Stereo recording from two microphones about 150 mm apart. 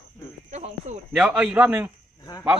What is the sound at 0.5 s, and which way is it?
Speech, 50° right (ahead or behind).